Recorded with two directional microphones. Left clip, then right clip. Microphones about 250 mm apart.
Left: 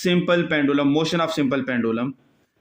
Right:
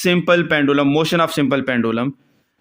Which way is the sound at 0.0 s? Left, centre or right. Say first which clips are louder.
Right 5 dB; right.